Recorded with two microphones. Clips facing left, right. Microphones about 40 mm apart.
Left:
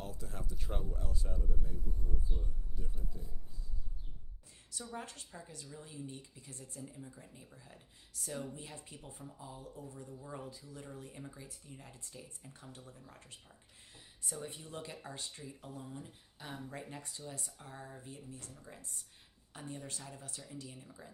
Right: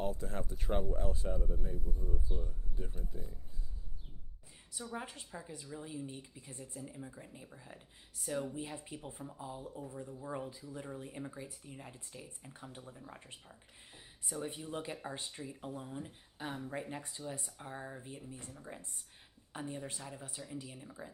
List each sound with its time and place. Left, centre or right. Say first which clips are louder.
0.0 s speech: right 8 dB; right
4.7 s speech: right 2 dB; centre
14.3 s speech: right 4 dB; centre